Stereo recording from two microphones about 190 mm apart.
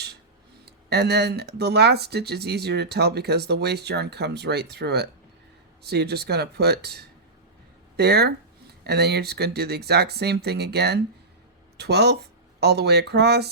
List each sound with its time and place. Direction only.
0.6 s speech: 60° right (ahead or behind)